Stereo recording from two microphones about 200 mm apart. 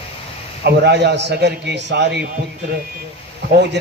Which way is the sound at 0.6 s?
55° right (ahead or behind).